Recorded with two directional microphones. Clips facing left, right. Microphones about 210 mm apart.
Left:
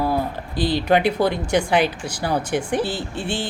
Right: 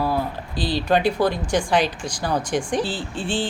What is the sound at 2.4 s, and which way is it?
Speech, 60° left (ahead or behind).